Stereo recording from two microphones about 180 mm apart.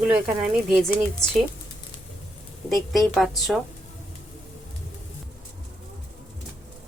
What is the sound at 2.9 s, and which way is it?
Speech, centre (ahead or behind).